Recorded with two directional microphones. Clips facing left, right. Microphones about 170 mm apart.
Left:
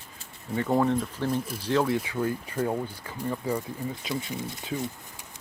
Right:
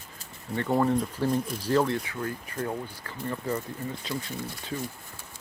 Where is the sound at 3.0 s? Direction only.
10° left (ahead or behind).